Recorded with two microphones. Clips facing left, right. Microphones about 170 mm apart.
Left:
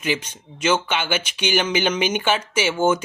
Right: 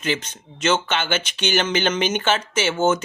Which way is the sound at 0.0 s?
10° left (ahead or behind).